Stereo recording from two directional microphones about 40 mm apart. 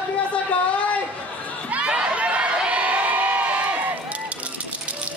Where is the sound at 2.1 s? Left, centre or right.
Right.